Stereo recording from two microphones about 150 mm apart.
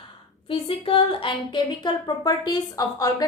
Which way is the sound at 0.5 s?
35° left (ahead or behind).